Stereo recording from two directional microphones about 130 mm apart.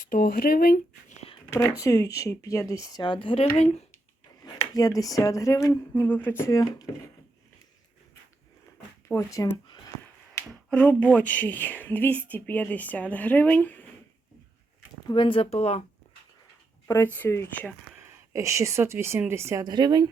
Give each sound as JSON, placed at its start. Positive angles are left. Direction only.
{"t": 0.0, "sound": "speech", "side_deg": 90}
{"t": 1.5, "sound": "speech", "side_deg": 20}
{"t": 4.7, "sound": "speech", "side_deg": 30}
{"t": 9.0, "sound": "speech", "side_deg": 25}
{"t": 10.5, "sound": "speech", "side_deg": 10}
{"t": 15.0, "sound": "speech", "side_deg": 40}
{"t": 16.8, "sound": "speech", "side_deg": 20}
{"t": 18.0, "sound": "speech", "side_deg": -25}
{"t": 19.6, "sound": "speech", "side_deg": -35}